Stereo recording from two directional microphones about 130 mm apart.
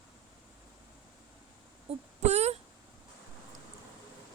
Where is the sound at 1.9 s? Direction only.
55° right (ahead or behind).